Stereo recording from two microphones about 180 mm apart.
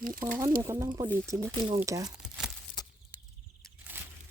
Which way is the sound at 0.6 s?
20° right (ahead or behind).